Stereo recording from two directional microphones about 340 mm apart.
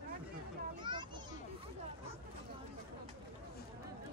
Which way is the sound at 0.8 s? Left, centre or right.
Centre.